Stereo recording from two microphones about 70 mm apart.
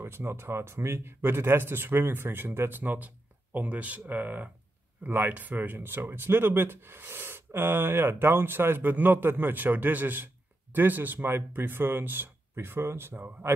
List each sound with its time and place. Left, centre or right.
0.0 s speech: right